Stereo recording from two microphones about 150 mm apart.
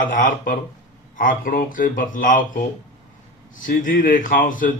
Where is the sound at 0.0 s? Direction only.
60° left (ahead or behind).